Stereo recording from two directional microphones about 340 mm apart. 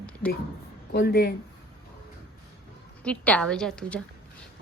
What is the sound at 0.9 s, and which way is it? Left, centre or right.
Speech, left.